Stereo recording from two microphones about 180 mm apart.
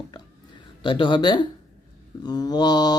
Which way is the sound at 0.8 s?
25° left (ahead or behind).